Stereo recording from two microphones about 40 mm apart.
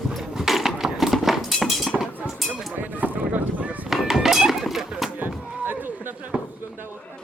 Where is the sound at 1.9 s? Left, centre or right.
Right.